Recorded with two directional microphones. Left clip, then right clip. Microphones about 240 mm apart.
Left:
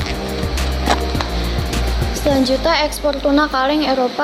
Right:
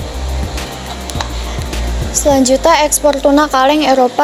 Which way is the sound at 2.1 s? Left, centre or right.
Right.